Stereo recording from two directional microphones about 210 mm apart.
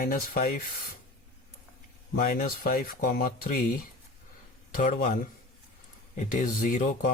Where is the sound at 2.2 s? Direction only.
40° left (ahead or behind).